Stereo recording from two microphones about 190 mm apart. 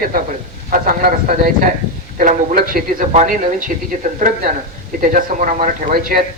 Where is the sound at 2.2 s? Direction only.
45° right (ahead or behind).